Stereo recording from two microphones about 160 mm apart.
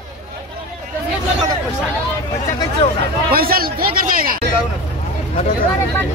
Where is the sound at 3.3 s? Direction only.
70° right (ahead or behind).